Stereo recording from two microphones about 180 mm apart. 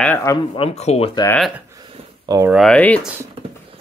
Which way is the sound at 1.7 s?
20° right (ahead or behind).